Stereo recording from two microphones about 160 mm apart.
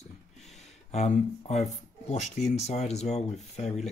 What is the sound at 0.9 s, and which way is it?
Speech, 45° left (ahead or behind).